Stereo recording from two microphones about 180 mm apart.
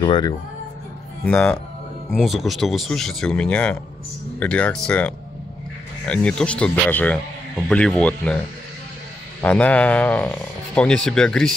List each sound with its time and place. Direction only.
0.0 s speech: 25° left (ahead or behind)
1.2 s speech: 5° left (ahead or behind)
9.4 s speech: 10° left (ahead or behind)